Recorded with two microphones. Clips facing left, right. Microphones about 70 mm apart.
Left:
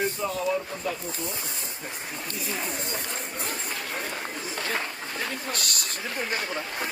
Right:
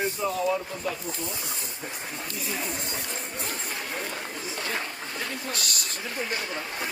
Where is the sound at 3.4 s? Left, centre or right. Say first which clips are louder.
Left 1 dB; left.